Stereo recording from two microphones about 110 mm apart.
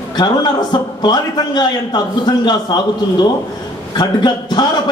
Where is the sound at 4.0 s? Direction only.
40° left (ahead or behind).